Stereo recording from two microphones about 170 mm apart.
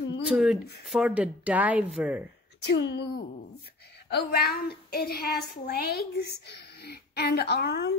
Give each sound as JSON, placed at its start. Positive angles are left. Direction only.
{"t": 0.3, "sound": "speech", "side_deg": -5}
{"t": 2.6, "sound": "speech", "side_deg": 90}
{"t": 4.1, "sound": "a woman's voice", "side_deg": 70}